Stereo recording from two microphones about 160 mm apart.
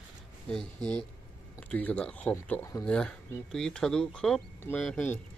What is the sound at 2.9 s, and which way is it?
Speech, 5° left (ahead or behind).